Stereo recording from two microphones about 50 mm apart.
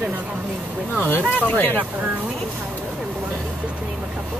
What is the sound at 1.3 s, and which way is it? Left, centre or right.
Speech, left.